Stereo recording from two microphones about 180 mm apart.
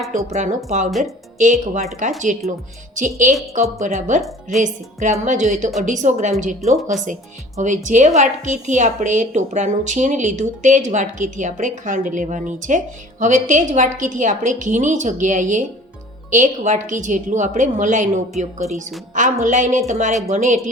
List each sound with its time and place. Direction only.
0.3 s a woman's voice: 40° right (ahead or behind)
0.9 s a woman's voice: centre (ahead or behind)
1.4 s a woman's voice: 45° right (ahead or behind)